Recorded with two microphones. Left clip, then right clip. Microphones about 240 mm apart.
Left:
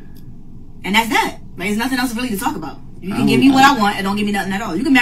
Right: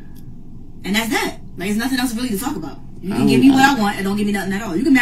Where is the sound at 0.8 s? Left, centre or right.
Centre.